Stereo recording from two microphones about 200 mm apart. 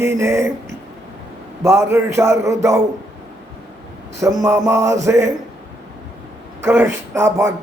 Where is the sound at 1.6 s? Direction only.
15° right (ahead or behind).